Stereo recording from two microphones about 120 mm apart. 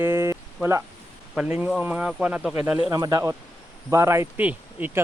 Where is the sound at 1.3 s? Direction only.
10° right (ahead or behind).